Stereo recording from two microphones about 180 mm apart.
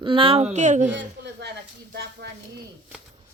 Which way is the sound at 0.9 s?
70° right (ahead or behind).